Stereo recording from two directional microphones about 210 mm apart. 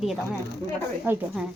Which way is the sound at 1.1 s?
10° right (ahead or behind).